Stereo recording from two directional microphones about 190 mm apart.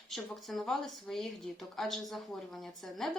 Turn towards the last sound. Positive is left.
turn(degrees=5)  # may be behind; listen again after turning